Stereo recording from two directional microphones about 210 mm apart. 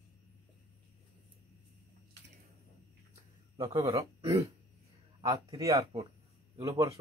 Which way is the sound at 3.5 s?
20° right (ahead or behind).